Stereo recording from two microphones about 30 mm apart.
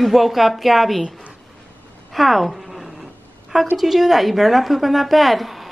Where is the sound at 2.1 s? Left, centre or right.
Centre.